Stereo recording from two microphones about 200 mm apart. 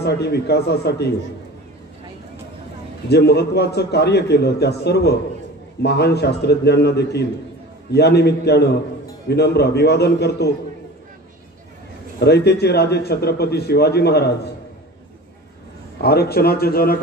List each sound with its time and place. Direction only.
0.0 s a man's voice: 55° left (ahead or behind)
3.1 s a man's voice: 55° left (ahead or behind)
12.2 s a man's voice: 55° left (ahead or behind)
16.0 s a man's voice: 50° left (ahead or behind)